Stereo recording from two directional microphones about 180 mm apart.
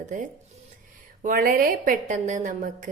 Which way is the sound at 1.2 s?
50° right (ahead or behind).